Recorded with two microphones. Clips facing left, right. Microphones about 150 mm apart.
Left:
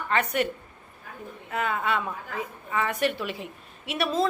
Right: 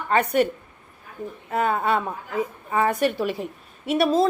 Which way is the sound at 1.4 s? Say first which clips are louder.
Right 5 dB; 40° right (ahead or behind).